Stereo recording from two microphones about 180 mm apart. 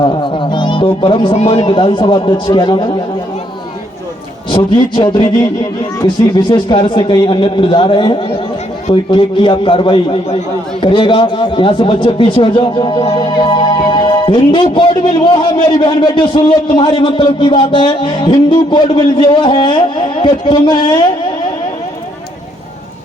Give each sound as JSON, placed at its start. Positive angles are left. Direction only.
{"t": 0.0, "sound": "music", "side_deg": 25}
{"t": 1.0, "sound": "a man's voice", "side_deg": 25}
{"t": 4.5, "sound": "a man's voice", "side_deg": 25}
{"t": 6.5, "sound": "a man's voice", "side_deg": 25}